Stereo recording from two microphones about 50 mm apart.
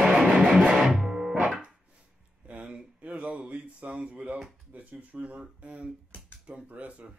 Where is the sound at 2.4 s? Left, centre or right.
Right.